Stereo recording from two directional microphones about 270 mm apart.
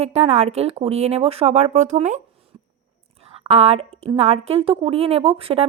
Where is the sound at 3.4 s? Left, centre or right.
Right.